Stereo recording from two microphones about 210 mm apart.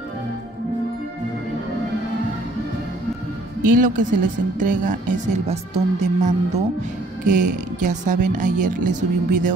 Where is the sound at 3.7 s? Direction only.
40° right (ahead or behind).